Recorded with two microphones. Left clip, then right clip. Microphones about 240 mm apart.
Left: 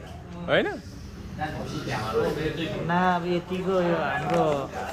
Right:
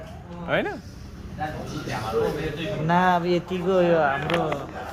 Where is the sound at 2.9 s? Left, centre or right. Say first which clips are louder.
Right 4 dB; right.